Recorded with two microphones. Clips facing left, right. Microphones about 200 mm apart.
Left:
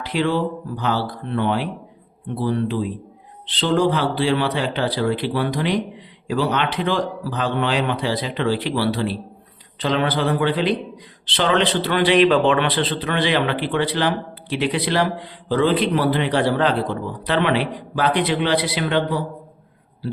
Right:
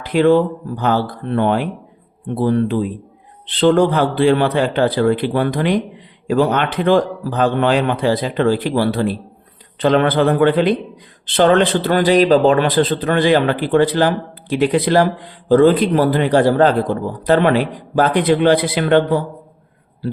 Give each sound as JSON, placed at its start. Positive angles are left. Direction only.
{"t": 0.0, "sound": "a man's voice", "side_deg": -50}